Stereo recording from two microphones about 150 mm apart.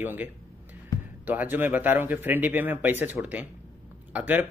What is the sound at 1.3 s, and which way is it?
A man's voice, 10° right (ahead or behind).